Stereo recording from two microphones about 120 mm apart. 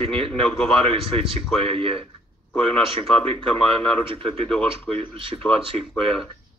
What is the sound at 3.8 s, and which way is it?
Speech, 10° left (ahead or behind).